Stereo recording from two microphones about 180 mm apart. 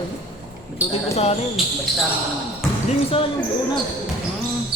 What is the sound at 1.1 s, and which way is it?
Speech, 35° left (ahead or behind).